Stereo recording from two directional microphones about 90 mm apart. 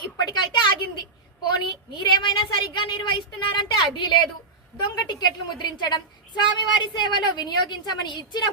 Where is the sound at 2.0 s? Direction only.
55° left (ahead or behind).